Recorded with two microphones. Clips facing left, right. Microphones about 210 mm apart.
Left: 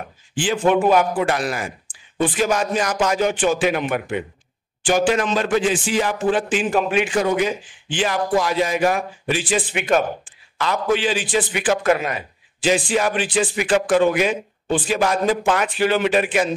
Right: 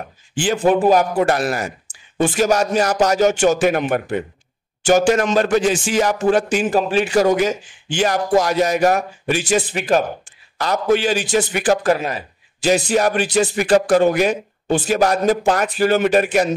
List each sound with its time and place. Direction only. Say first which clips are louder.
0.4 s a man's voice: right 2 dB; 40° right (ahead or behind)